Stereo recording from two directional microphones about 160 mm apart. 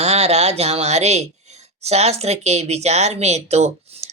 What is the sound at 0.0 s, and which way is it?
Speech, 40° right (ahead or behind).